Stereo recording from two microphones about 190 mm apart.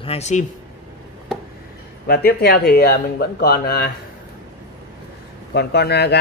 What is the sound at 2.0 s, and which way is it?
Speech, 55° left (ahead or behind).